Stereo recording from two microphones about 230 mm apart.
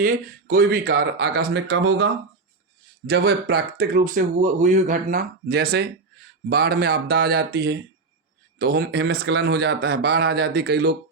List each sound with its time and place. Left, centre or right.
0.0 s speech: right